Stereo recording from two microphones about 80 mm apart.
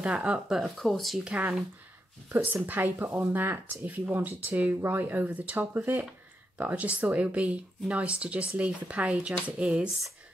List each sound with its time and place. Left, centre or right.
0.0 s speech: centre
1.2 s speech: centre